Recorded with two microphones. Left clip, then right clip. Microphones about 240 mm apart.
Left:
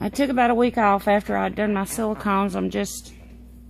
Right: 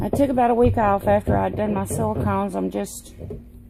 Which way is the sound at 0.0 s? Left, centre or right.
Left.